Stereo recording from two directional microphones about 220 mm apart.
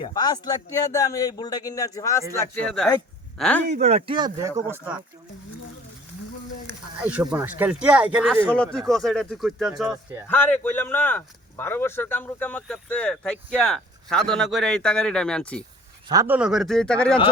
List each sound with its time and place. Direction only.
0.0 s a man's voice: 20° left (ahead or behind)
3.7 s speech: 30° right (ahead or behind); by 5.0 s 10° right (ahead or behind)
7.0 s speech: 5° right (ahead or behind)
10.2 s speech: 10° left (ahead or behind)
16.0 s speech: 10° right (ahead or behind); by 17.2 s 5° left (ahead or behind)